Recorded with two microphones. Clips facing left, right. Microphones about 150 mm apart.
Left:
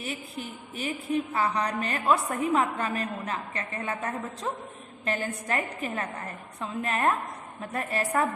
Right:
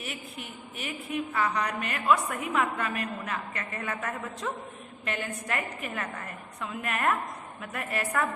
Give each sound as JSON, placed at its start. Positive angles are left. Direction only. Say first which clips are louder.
{"t": 0.0, "sound": "a woman's voice", "louder": "left 4 dB", "side_deg": 35}